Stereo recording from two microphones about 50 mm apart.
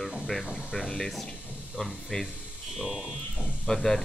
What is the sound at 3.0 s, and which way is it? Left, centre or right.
Speech, centre.